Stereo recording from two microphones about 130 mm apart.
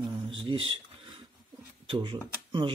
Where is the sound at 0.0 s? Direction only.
40° right (ahead or behind).